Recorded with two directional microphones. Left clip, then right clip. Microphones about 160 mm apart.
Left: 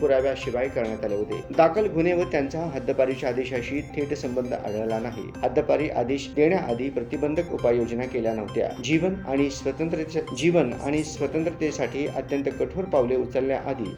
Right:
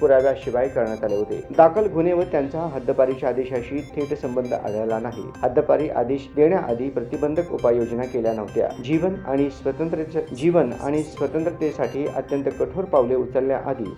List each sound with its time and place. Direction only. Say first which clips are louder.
0.0 s speech: right 5 dB; 5° left (ahead or behind)
10.9 s speech: right 2 dB; centre (ahead or behind)